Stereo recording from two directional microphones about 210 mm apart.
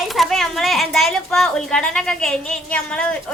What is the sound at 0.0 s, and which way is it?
Speech, centre (ahead or behind).